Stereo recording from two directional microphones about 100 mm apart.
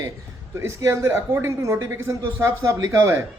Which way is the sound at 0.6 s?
30° right (ahead or behind).